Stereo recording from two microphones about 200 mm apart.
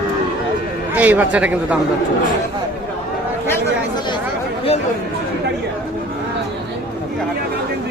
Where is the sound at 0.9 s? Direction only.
10° right (ahead or behind).